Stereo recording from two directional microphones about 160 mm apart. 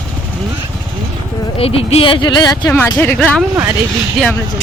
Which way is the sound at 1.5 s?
35° left (ahead or behind).